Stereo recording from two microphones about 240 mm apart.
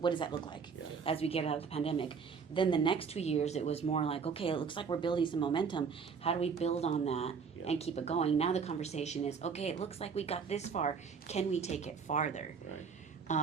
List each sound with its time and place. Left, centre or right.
0.0 s speech: centre